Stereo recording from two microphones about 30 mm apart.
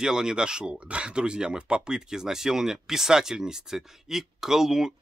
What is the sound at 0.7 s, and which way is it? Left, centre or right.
Speech, right.